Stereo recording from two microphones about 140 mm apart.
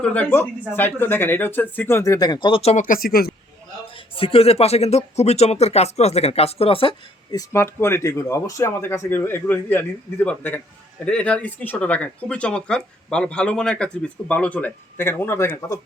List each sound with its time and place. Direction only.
0.0 s speech: 10° left (ahead or behind); by 2.8 s 45° left (ahead or behind)
2.8 s speech: 85° left
3.9 s speech: 40° left (ahead or behind)
7.3 s speech: 25° left (ahead or behind)